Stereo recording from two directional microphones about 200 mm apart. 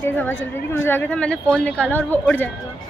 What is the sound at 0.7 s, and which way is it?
A man's voice, 10° left (ahead or behind).